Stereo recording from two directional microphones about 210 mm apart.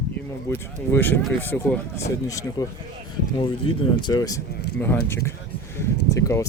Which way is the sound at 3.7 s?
25° left (ahead or behind).